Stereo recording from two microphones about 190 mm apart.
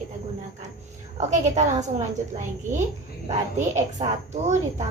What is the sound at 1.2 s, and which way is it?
Speech, 35° right (ahead or behind).